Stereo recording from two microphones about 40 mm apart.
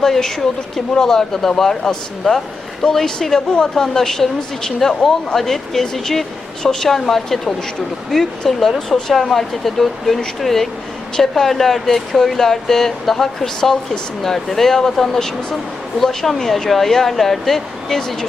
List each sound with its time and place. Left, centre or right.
0.0 s speech: centre